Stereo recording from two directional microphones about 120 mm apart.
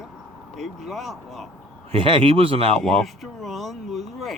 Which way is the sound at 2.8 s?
Centre (ahead or behind).